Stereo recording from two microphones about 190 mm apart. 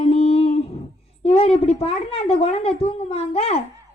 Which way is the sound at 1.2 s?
30° left (ahead or behind).